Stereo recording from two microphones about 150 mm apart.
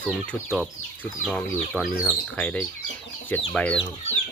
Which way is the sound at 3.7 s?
45° left (ahead or behind).